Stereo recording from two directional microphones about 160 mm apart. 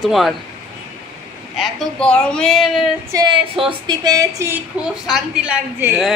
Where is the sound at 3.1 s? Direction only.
25° right (ahead or behind).